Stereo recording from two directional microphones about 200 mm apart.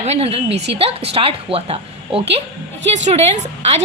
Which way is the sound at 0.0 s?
30° right (ahead or behind).